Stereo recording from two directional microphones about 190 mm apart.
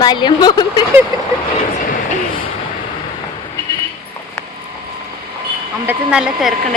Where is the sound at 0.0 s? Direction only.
20° left (ahead or behind).